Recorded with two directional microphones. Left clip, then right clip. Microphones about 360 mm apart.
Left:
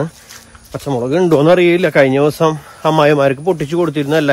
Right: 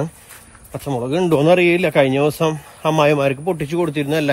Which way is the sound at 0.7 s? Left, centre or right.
Centre.